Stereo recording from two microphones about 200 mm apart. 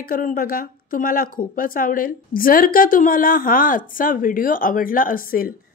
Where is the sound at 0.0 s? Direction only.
45° left (ahead or behind).